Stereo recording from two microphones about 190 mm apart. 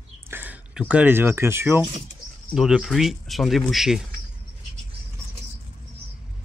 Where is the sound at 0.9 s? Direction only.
10° right (ahead or behind).